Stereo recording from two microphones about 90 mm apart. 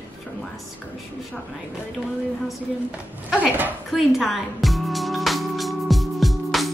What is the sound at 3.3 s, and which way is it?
Speech, 15° right (ahead or behind).